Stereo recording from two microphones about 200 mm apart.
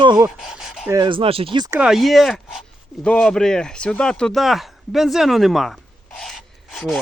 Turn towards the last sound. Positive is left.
turn(degrees=0)  # may be behind; listen again after turning